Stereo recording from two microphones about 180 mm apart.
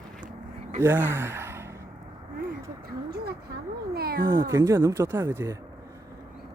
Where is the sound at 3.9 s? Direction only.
60° right (ahead or behind).